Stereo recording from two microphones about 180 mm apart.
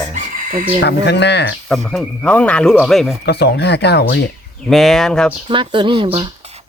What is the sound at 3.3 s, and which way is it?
Speech, 70° left (ahead or behind).